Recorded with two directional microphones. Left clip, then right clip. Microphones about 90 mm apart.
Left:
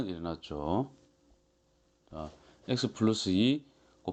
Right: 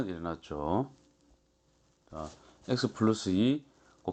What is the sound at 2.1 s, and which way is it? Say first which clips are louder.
Speech: right 1 dB; 15° left (ahead or behind).